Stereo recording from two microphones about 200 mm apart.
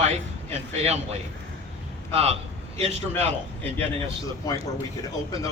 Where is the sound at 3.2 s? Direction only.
10° left (ahead or behind).